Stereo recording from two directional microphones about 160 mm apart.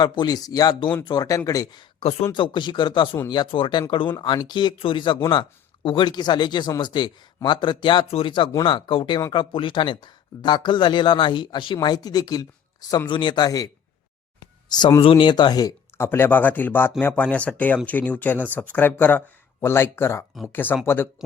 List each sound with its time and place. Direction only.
0.0 s speech: 25° left (ahead or behind)
2.0 s speech: 40° left (ahead or behind)
2.3 s speech: 30° left (ahead or behind)
14.3 s a sound: 25° left (ahead or behind)
15.1 s speech: 30° left (ahead or behind)
16.0 s speech: 10° left (ahead or behind)